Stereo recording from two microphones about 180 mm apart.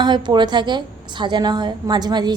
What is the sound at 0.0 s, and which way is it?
A woman's voice, 25° right (ahead or behind).